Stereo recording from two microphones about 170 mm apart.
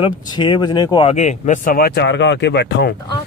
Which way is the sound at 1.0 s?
45° left (ahead or behind).